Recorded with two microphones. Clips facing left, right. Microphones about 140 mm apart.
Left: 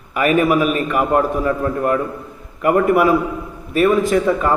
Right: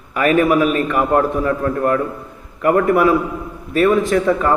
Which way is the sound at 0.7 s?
15° left (ahead or behind).